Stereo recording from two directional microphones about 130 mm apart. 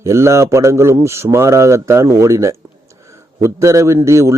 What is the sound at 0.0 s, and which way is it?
A man's voice, 20° right (ahead or behind).